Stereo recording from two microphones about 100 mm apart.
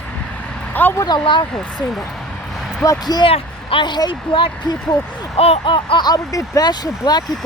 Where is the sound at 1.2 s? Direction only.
50° left (ahead or behind).